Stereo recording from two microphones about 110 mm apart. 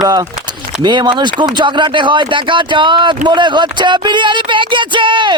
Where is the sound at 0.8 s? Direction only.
45° right (ahead or behind).